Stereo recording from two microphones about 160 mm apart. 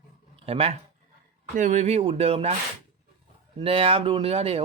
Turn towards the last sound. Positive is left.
turn(degrees=-40)  # may be behind; listen again after turning